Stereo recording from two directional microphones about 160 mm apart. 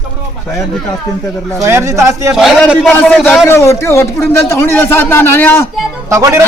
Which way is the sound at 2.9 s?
10° left (ahead or behind).